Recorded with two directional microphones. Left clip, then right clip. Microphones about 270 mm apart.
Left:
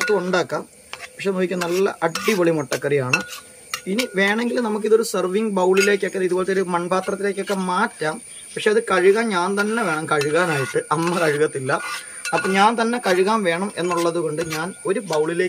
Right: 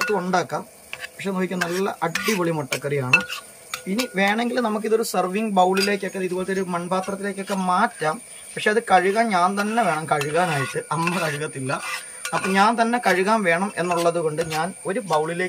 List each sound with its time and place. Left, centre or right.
0.1 s speech: centre
2.8 s cutlery: centre
4.1 s speech: centre